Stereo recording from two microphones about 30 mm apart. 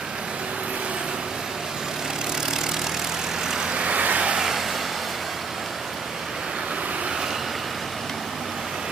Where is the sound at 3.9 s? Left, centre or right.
Right.